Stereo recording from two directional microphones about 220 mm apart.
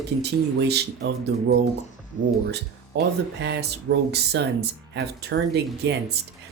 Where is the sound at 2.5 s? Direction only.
50° right (ahead or behind).